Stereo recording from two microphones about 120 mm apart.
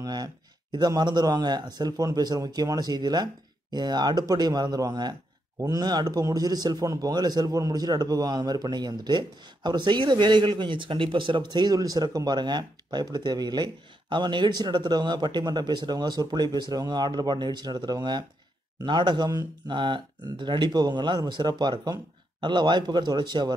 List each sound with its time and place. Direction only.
0.0 s a man's voice: 35° right (ahead or behind)